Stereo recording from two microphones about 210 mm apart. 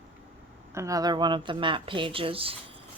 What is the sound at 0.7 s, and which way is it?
Speech, 15° right (ahead or behind).